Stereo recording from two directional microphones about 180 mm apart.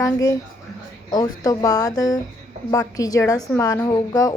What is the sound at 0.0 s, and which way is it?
A woman's voice, 20° left (ahead or behind).